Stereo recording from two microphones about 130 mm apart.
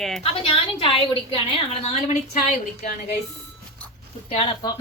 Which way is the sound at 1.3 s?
50° left (ahead or behind).